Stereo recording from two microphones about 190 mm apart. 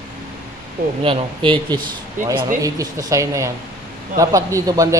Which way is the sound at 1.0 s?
25° right (ahead or behind).